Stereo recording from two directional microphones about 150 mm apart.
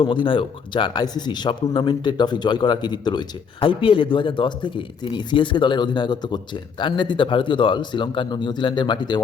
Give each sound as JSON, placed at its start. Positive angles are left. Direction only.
{"t": 0.0, "sound": "speech", "side_deg": 35}